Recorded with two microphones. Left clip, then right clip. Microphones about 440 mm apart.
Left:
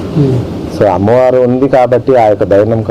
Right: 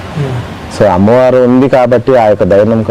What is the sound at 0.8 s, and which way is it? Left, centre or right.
A man's voice, right.